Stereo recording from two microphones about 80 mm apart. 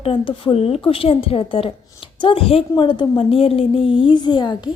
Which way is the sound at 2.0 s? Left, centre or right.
Left.